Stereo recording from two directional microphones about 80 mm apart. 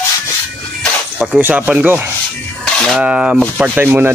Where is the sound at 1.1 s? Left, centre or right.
Centre.